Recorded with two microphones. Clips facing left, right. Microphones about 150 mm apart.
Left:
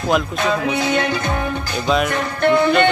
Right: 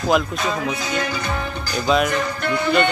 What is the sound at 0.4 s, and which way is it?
Music, 65° left (ahead or behind).